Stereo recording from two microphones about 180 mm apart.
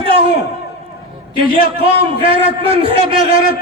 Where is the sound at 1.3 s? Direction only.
30° right (ahead or behind).